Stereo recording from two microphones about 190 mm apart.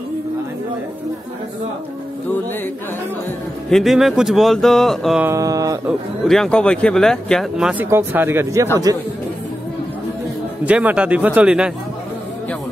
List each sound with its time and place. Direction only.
3.7 s speech: centre (ahead or behind)
5.3 s speech: 15° right (ahead or behind)
5.9 s speech: centre (ahead or behind); by 9.0 s 20° right (ahead or behind)
10.6 s speech: 10° right (ahead or behind)